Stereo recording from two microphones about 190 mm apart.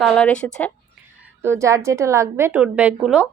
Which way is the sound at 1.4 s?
15° right (ahead or behind).